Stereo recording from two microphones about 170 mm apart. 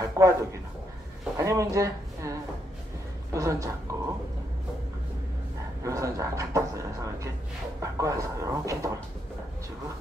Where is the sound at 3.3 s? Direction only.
20° right (ahead or behind).